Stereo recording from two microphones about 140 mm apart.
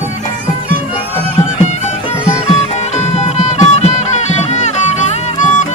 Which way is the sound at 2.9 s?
50° left (ahead or behind).